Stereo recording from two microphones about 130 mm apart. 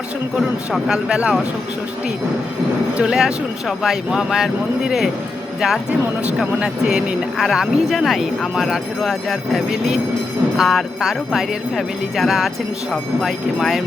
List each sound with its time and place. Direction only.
0.3 s speech: 5° right (ahead or behind)
3.0 s speech: 5° right (ahead or behind)